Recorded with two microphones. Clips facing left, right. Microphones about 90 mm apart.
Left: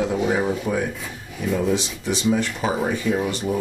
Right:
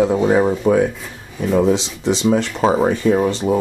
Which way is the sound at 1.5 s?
75° right (ahead or behind).